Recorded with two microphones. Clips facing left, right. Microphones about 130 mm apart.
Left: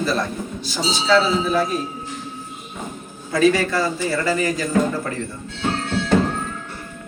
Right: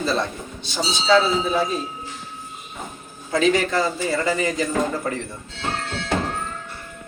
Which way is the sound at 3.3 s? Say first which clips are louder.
Left 2 dB; 20° right (ahead or behind).